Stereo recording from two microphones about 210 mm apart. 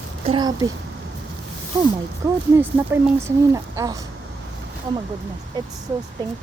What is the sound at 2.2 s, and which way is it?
Speech, 10° right (ahead or behind).